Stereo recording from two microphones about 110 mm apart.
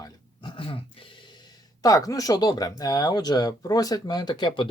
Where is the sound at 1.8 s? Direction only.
30° left (ahead or behind).